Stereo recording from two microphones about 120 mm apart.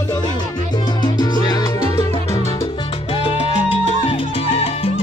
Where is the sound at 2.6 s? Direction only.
45° left (ahead or behind).